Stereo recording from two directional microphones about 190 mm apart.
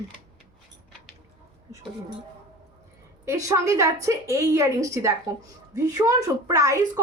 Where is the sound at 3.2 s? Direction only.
15° right (ahead or behind).